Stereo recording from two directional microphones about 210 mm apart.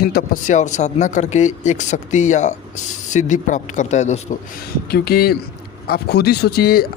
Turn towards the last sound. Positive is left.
turn(degrees=45)  # may be behind; listen again after turning